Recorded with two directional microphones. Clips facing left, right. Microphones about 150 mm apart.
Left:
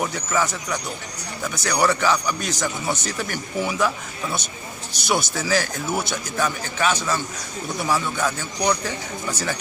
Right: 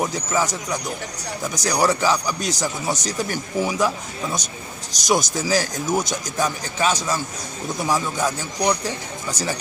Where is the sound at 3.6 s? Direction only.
15° right (ahead or behind).